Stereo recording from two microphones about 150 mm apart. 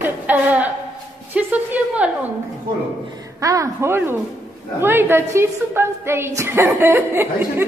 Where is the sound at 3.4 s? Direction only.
20° right (ahead or behind).